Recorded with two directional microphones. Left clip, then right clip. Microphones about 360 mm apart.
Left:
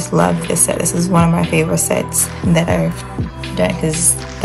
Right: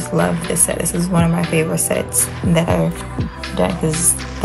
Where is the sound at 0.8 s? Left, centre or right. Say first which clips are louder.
Left 3 dB; left.